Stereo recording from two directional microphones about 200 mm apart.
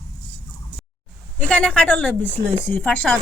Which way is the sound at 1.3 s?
5° left (ahead or behind).